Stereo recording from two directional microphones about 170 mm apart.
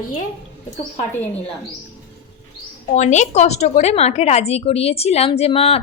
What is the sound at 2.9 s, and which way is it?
A woman's voice, 45° left (ahead or behind).